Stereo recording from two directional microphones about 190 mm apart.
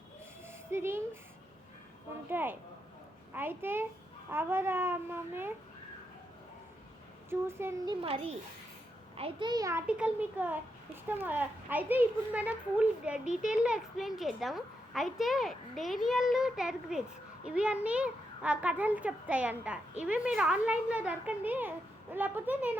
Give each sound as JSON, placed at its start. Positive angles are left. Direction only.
{"t": 0.4, "sound": "a sound", "side_deg": -15}
{"t": 2.3, "sound": "a child's voice", "side_deg": -10}
{"t": 7.3, "sound": "a child's voice", "side_deg": -15}
{"t": 8.0, "sound": "a child's voice", "side_deg": -30}